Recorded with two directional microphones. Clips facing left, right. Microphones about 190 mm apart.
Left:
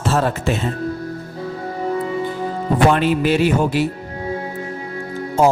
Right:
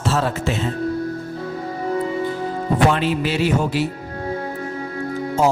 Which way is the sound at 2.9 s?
55° left (ahead or behind).